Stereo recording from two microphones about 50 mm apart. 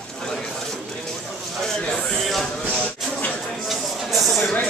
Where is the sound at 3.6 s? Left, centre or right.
Centre.